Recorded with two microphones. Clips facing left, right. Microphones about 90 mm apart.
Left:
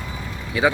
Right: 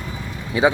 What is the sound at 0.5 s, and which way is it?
Speech, 25° right (ahead or behind).